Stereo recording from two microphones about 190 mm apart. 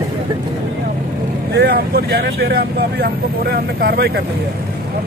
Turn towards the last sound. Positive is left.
turn(degrees=-55)  # may be behind; listen again after turning